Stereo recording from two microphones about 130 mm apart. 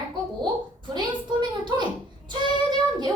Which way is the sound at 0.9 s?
35° right (ahead or behind).